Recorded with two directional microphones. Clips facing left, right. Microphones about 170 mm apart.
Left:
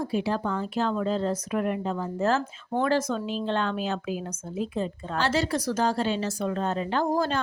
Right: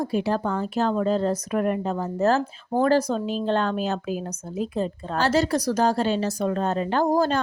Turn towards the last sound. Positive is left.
turn(degrees=-40)  # may be behind; listen again after turning